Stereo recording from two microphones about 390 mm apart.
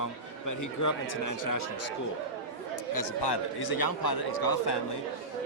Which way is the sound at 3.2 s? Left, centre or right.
Left.